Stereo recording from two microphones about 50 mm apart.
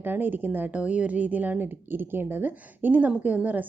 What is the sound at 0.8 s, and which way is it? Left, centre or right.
A woman's voice, right.